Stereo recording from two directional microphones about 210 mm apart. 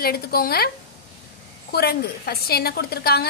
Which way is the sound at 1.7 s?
50° left (ahead or behind).